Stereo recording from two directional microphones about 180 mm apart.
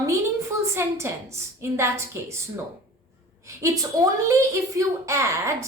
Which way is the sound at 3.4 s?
20° right (ahead or behind).